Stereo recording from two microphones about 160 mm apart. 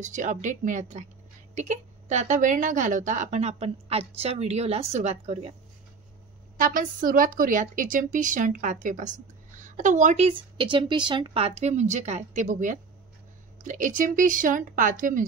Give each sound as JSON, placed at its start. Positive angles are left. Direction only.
{"t": 0.0, "sound": "a woman's voice", "side_deg": -50}
{"t": 6.6, "sound": "a woman's voice", "side_deg": -60}
{"t": 10.3, "sound": "a woman's voice", "side_deg": -30}